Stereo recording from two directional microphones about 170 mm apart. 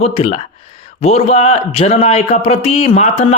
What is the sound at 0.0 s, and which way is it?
Speech, 40° left (ahead or behind).